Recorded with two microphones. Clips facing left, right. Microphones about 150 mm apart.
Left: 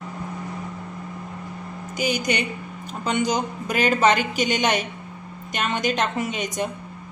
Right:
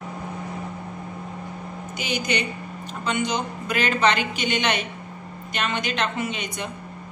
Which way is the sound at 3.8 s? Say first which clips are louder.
Left 3 dB; 45° left (ahead or behind).